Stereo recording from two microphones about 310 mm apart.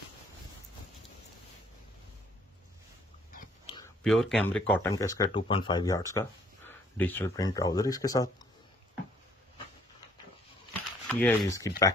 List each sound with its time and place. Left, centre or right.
3.3 s dog: left
4.0 s speech: centre
10.7 s a sound: centre